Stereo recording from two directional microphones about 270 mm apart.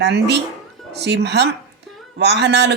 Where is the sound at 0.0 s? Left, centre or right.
Right.